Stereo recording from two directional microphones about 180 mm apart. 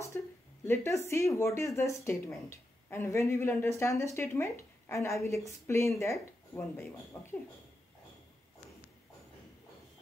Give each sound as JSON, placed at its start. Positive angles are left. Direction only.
{"t": 0.1, "sound": "speech", "side_deg": 10}